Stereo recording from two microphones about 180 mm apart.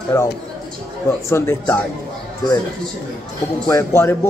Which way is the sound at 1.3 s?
15° left (ahead or behind).